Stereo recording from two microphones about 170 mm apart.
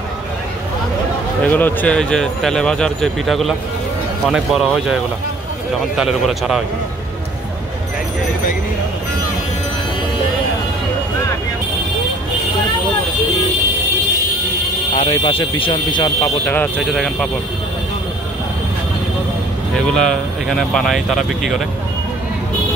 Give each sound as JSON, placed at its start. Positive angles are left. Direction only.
{"t": 1.4, "sound": "speech", "side_deg": 10}
{"t": 15.0, "sound": "speech", "side_deg": 30}
{"t": 16.4, "sound": "speech", "side_deg": 10}
{"t": 19.7, "sound": "speech", "side_deg": 5}